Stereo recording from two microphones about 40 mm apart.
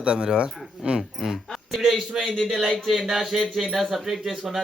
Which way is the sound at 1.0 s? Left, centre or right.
Centre.